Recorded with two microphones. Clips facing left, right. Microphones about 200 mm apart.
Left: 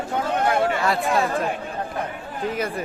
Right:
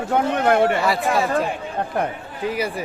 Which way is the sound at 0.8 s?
Centre (ahead or behind).